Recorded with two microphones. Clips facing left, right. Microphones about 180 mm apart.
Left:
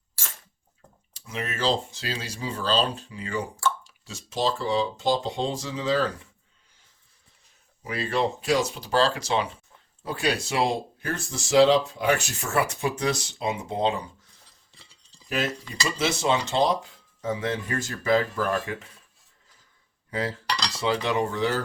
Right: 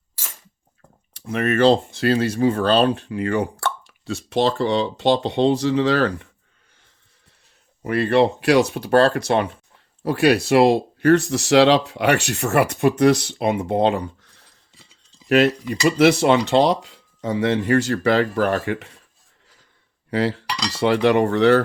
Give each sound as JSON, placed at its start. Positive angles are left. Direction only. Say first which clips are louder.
{"t": 1.1, "sound": "speech", "louder": "right 12 dB", "side_deg": -60}
{"t": 7.8, "sound": "speech", "louder": "right 9 dB", "side_deg": -60}
{"t": 20.1, "sound": "cutlery", "louder": "right 8 dB", "side_deg": -70}
{"t": 20.7, "sound": "speech", "louder": "right 9 dB", "side_deg": -65}